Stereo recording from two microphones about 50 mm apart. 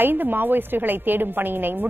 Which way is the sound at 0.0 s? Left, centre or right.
Right.